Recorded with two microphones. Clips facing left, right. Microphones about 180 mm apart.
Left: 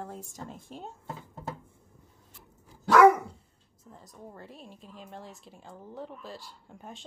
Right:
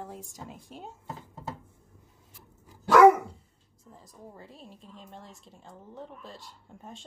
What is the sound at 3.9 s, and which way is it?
Speech, centre (ahead or behind).